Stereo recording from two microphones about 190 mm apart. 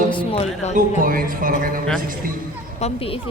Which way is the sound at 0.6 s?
35° left (ahead or behind).